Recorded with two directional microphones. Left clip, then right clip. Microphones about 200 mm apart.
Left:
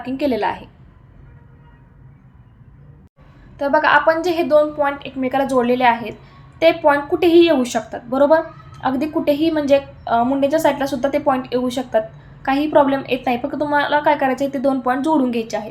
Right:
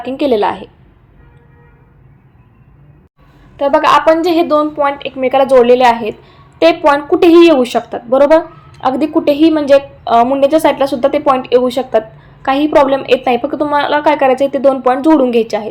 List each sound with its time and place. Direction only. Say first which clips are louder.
0.0 s a woman's voice: right 7 dB; 20° right (ahead or behind)
3.6 s a woman's voice: right 5 dB; 20° right (ahead or behind)